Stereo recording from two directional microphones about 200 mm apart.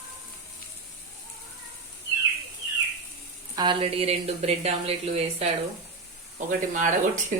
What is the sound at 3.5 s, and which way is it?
A woman's voice, 20° right (ahead or behind).